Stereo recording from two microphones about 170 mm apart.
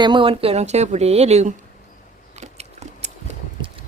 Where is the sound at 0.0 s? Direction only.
30° right (ahead or behind).